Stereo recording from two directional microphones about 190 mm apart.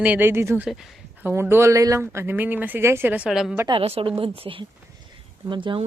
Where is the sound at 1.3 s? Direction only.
10° right (ahead or behind).